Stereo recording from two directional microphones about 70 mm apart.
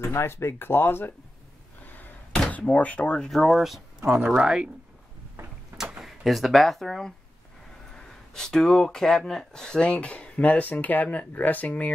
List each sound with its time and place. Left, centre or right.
0.0 s speech: left
1.9 s door: left
2.5 s speech: left
3.2 s speech: centre
5.8 s speech: centre; by 11.9 s left